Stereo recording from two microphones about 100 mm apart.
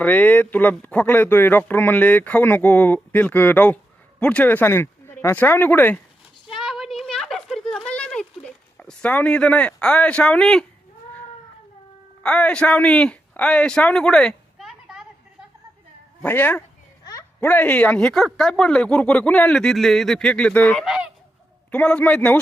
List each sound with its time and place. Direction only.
0.0 s speech: 15° left (ahead or behind)
6.5 s a sound: 5° right (ahead or behind)
12.2 s a man's voice: 10° left (ahead or behind)
16.2 s speech: 20° left (ahead or behind)
18.3 s speech: 5° left (ahead or behind)
20.8 s honk: 10° right (ahead or behind)
21.7 s speech: 15° left (ahead or behind)